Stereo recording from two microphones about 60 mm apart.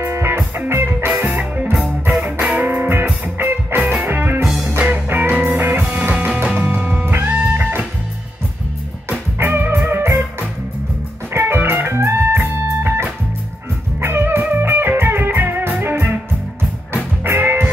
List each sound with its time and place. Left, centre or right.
0.0 s music: right
2.4 s music: right
9.4 s music: right
11.3 s music: right
17.2 s music: right